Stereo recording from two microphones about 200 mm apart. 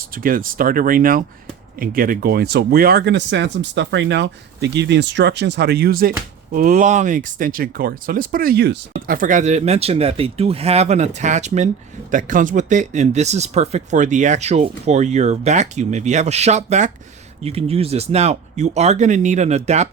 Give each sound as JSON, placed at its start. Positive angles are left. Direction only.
{"t": 0.1, "sound": "speech", "side_deg": -45}